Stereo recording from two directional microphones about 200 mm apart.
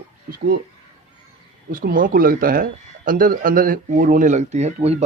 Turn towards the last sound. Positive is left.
turn(degrees=-30)  # may be behind; listen again after turning